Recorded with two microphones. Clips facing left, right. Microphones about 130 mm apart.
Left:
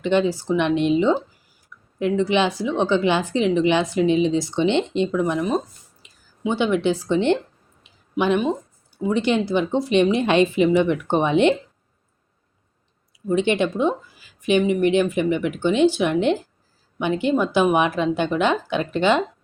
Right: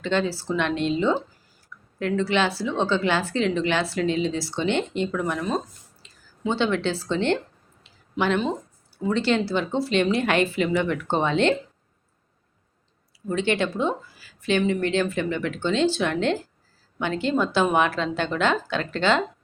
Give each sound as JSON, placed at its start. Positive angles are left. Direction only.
{"t": 0.0, "sound": "a woman's voice", "side_deg": 15}
{"t": 7.9, "sound": "a sound", "side_deg": 15}
{"t": 9.0, "sound": "a woman's voice", "side_deg": 15}
{"t": 13.2, "sound": "a woman's voice", "side_deg": 20}